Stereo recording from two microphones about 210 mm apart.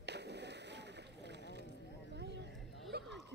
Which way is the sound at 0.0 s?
55° right (ahead or behind).